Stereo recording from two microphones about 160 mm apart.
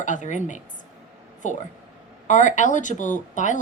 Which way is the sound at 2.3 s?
50° left (ahead or behind).